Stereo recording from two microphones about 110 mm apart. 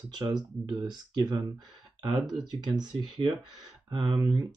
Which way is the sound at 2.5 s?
40° right (ahead or behind).